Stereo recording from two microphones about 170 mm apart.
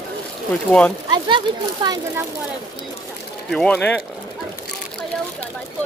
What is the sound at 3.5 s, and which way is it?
Speech, 5° left (ahead or behind).